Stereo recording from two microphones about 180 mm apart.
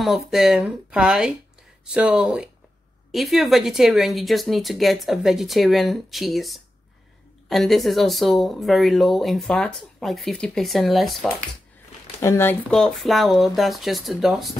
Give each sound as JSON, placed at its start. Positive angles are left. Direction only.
{"t": 0.0, "sound": "speech", "side_deg": 0}
{"t": 12.2, "sound": "speech", "side_deg": 15}